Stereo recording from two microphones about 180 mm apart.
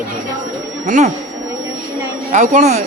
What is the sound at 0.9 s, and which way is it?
Speech, 45° right (ahead or behind).